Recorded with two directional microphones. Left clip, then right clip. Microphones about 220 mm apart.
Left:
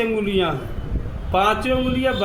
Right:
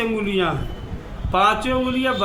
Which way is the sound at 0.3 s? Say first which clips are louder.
Even; 15° right (ahead or behind).